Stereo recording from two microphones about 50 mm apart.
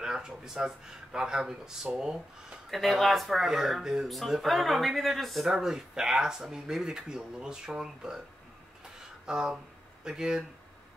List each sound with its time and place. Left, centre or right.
0.0 s speech: centre
2.7 s speech: centre
4.1 s speech: centre
5.5 s speech: centre
8.9 s a sound: centre
10.0 s speech: centre